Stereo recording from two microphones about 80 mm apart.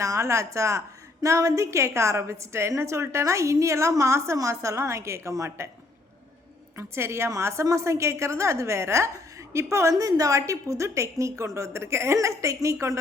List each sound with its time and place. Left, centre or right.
0.0 s a woman's voice: right
6.7 s a woman's voice: right
9.9 s a woman's voice: right